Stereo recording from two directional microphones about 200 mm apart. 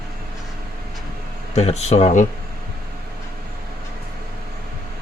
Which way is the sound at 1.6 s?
35° left (ahead or behind).